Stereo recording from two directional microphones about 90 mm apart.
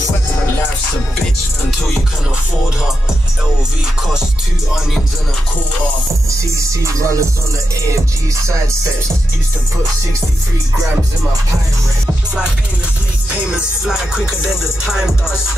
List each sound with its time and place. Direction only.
6.8 s music: 35° right (ahead or behind)
13.3 s music: 10° right (ahead or behind)